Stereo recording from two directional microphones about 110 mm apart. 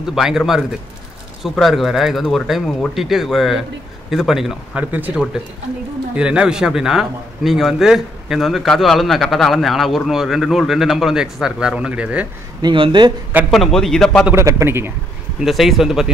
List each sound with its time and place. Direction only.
0.0 s a man's voice: 5° right (ahead or behind)
4.7 s a man's voice: 15° right (ahead or behind)
12.6 s speech: 50° right (ahead or behind)
13.5 s a man's voice: centre (ahead or behind)
14.3 s a man's voice: 25° right (ahead or behind)
15.4 s a man's voice: centre (ahead or behind)